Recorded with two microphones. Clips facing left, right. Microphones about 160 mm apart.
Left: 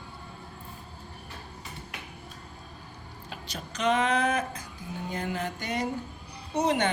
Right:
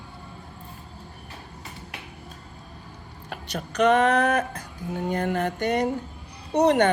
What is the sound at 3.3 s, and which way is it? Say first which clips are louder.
Speech: right 7 dB; 65° right (ahead or behind).